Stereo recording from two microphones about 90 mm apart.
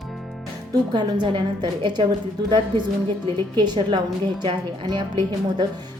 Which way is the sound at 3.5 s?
60° right (ahead or behind).